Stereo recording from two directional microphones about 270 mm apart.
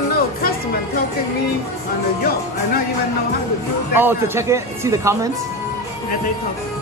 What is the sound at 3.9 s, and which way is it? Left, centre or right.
Speech, centre.